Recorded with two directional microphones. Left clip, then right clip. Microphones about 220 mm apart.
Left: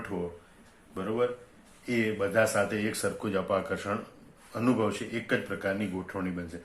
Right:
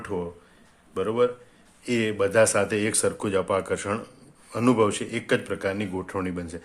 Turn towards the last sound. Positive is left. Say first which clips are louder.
# right 5 dB
turn(degrees=-50)  # may be behind; listen again after turning